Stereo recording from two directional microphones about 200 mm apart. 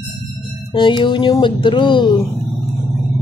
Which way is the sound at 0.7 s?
25° left (ahead or behind).